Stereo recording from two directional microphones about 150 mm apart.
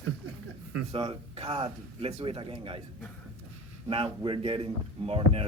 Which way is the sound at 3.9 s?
40° right (ahead or behind).